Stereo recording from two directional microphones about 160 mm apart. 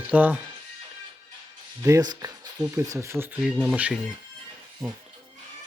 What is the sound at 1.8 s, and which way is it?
Speech, 25° right (ahead or behind).